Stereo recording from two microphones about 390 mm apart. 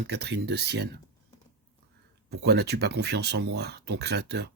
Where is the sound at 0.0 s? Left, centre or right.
Right.